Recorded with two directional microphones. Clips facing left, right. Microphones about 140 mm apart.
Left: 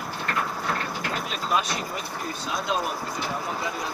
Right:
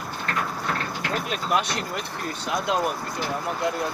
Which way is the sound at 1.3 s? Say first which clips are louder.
Right 1 dB; 65° right (ahead or behind).